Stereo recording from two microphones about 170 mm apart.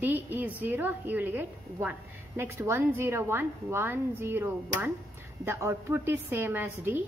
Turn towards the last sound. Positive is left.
turn(degrees=-10)  # may be behind; listen again after turning